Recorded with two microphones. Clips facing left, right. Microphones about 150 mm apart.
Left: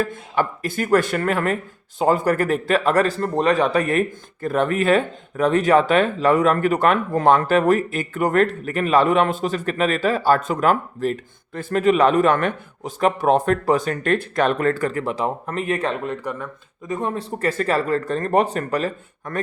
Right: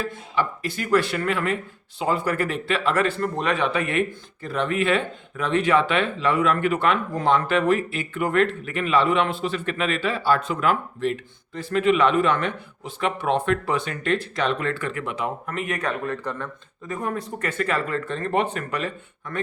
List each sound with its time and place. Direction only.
0.0 s speech: 50° left (ahead or behind)